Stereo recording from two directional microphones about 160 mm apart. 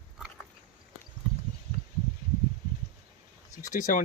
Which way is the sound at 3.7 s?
55° left (ahead or behind).